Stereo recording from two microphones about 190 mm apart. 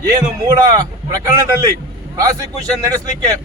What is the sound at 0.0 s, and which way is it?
A man's voice, 20° right (ahead or behind).